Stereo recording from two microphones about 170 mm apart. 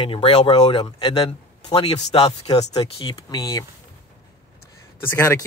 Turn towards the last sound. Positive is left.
turn(degrees=15)  # may be behind; listen again after turning